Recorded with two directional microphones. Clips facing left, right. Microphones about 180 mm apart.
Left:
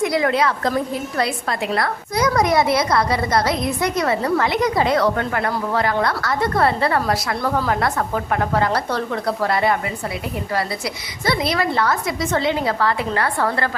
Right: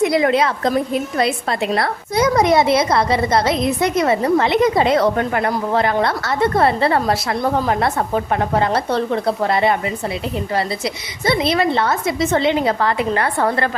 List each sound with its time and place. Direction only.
0.0 s a woman's voice: 20° right (ahead or behind)